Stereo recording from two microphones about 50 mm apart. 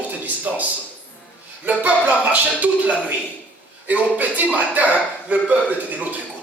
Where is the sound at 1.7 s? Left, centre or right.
Right.